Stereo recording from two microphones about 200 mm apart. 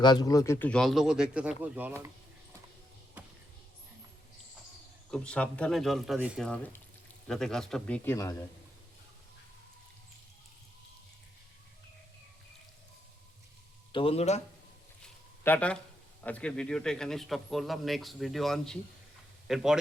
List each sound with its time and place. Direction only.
0.0 s speech: 20° left (ahead or behind); by 1.9 s 5° right (ahead or behind)
3.2 s basketball bounce: 5° right (ahead or behind)
5.1 s speech: 5° left (ahead or behind)
13.9 s a man's voice: 30° left (ahead or behind)
15.0 s a sound: 5° left (ahead or behind)
16.2 s speech: 5° left (ahead or behind)